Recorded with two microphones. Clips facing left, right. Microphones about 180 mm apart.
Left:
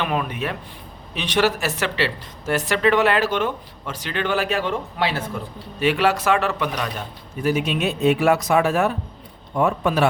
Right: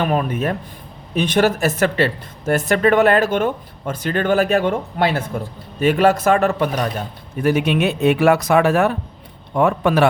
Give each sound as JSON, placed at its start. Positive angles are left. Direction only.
{"t": 0.0, "sound": "speech", "side_deg": -40}
{"t": 7.4, "sound": "a man's voice", "side_deg": -65}